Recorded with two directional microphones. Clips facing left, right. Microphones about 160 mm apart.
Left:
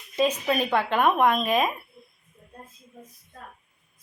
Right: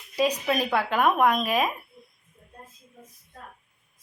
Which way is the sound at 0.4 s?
10° right (ahead or behind).